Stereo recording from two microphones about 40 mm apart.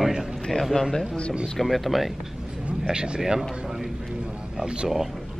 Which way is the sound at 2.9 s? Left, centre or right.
Centre.